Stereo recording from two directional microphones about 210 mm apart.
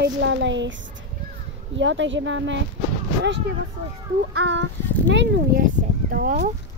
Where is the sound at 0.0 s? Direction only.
60° right (ahead or behind).